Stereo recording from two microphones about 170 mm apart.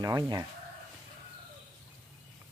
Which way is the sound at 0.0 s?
20° right (ahead or behind).